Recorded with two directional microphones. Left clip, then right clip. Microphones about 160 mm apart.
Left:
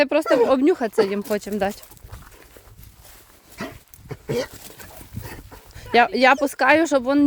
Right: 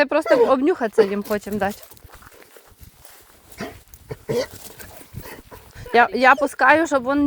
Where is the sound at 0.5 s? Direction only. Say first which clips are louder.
Right 1 dB; 20° left (ahead or behind).